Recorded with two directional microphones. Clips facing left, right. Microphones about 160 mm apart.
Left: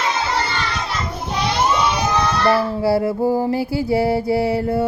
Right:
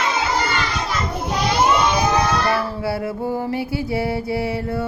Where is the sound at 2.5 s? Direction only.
35° left (ahead or behind).